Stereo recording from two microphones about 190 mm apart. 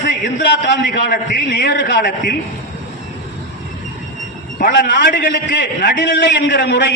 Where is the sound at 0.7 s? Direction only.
55° left (ahead or behind).